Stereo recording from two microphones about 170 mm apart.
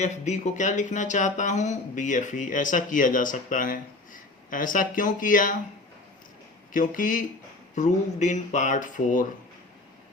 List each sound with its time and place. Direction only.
0.0 s speech: 45° left (ahead or behind)
6.7 s speech: 50° left (ahead or behind)